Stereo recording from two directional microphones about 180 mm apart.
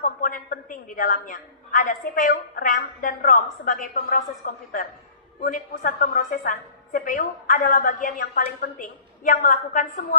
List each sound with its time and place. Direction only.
0.0 s a woman's voice: 50° left (ahead or behind)